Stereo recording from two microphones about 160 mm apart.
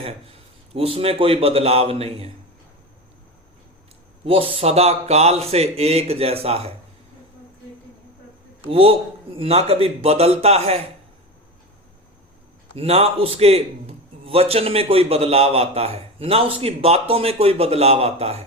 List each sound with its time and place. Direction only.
0.7 s a man's voice: 35° right (ahead or behind)
4.3 s a man's voice: 35° right (ahead or behind)
8.7 s a man's voice: 35° right (ahead or behind)
12.7 s a man's voice: 40° right (ahead or behind)